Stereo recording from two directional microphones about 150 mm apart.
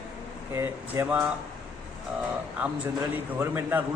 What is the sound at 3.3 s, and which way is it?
Speech, 15° right (ahead or behind).